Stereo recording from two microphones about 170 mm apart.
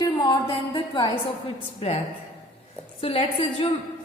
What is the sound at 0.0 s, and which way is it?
A woman's voice, 25° left (ahead or behind).